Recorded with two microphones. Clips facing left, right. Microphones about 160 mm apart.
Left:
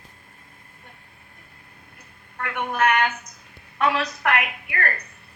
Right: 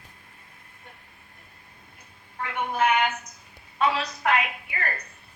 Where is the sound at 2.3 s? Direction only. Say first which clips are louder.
Left 1 dB; 65° left (ahead or behind).